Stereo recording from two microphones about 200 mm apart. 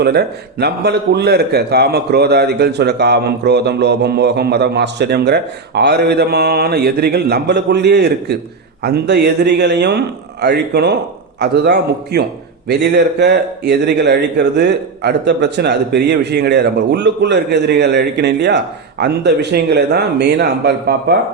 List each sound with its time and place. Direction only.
0.0 s a man's voice: 55° right (ahead or behind)